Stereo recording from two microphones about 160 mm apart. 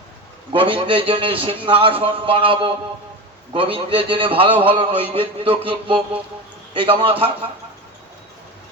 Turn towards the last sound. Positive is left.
turn(degrees=-35)  # may be behind; listen again after turning